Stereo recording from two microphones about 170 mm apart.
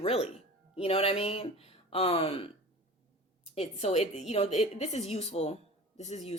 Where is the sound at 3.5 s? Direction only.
35° left (ahead or behind).